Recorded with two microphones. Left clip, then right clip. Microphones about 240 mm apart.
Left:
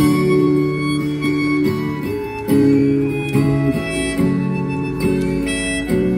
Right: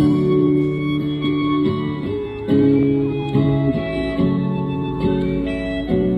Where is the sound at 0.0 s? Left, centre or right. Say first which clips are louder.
Left 2 dB; centre.